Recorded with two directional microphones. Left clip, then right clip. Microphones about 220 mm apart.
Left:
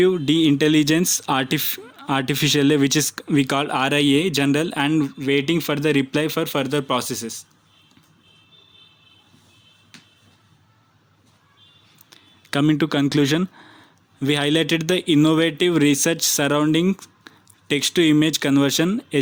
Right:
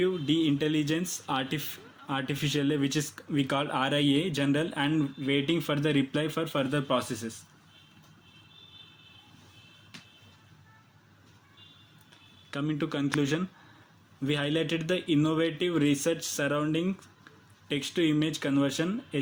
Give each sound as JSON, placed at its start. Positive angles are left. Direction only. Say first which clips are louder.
{"t": 0.0, "sound": "speech", "louder": "left 10 dB", "side_deg": 50}
{"t": 12.5, "sound": "speech", "louder": "left 13 dB", "side_deg": 50}